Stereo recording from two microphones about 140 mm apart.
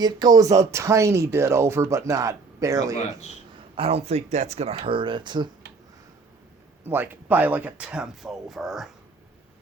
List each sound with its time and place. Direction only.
0.0 s speech: 25° right (ahead or behind)
3.8 s speech: 45° right (ahead or behind)
6.8 s speech: 15° right (ahead or behind)